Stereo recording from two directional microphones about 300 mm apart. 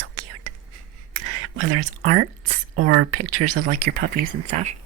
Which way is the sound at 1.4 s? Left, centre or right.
Right.